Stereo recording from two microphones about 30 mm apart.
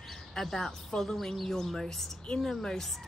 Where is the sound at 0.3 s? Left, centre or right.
Centre.